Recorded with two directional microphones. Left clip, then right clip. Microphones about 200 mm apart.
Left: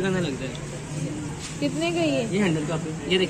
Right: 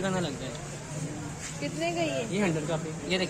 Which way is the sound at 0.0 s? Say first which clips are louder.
Left 4 dB; 55° right (ahead or behind).